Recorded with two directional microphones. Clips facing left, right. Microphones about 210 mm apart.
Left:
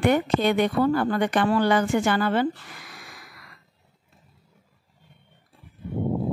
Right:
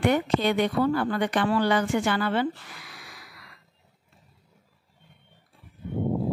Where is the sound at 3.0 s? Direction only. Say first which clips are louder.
Left 2 dB; 50° left (ahead or behind).